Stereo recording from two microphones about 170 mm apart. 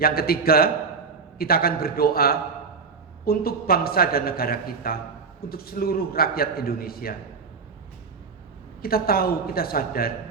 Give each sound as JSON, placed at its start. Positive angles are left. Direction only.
{"t": 0.0, "sound": "a man's voice", "side_deg": 60}
{"t": 8.8, "sound": "a man's voice", "side_deg": 60}